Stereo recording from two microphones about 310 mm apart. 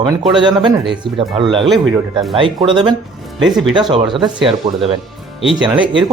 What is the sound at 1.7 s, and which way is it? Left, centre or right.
Speech, centre.